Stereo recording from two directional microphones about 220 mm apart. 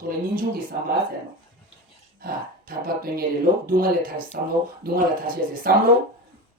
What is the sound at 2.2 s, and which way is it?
Speech, 40° right (ahead or behind).